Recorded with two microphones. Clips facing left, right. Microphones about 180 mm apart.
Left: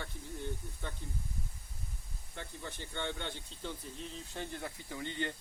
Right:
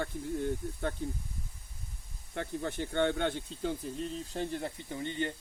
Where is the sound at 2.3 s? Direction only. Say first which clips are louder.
Right 10 dB; 65° right (ahead or behind).